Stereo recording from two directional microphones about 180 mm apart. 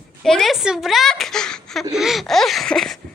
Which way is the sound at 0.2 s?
Centre (ahead or behind).